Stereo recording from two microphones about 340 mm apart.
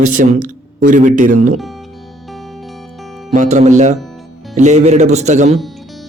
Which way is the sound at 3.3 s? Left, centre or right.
Right.